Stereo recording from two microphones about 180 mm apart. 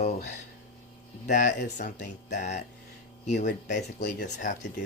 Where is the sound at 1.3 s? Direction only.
45° left (ahead or behind).